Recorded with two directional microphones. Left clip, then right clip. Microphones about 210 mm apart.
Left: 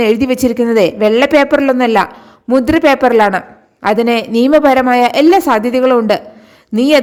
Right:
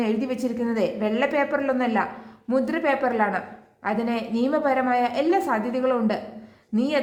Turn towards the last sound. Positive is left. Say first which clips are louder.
# left 14 dB
turn(degrees=45)  # may be behind; listen again after turning